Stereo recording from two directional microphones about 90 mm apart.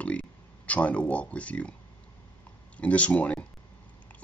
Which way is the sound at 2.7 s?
15° left (ahead or behind).